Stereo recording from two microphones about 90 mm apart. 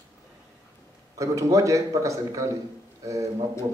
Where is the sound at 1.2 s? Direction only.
35° right (ahead or behind).